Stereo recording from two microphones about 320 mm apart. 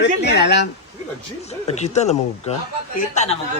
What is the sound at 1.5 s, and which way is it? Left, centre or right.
Speech, centre.